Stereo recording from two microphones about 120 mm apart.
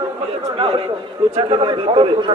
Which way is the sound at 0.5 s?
45° right (ahead or behind).